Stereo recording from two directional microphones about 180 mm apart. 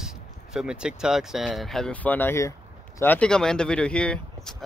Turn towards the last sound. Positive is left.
turn(degrees=5)  # may be behind; listen again after turning